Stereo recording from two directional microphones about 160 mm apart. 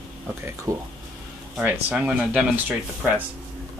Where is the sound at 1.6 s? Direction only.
10° right (ahead or behind).